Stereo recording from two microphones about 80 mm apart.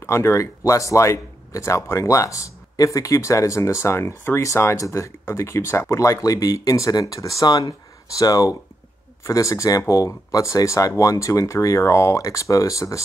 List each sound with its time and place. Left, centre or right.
0.0 s speech: left